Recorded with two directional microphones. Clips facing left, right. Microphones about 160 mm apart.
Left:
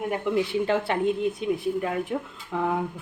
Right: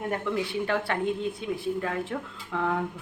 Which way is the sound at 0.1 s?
20° left (ahead or behind).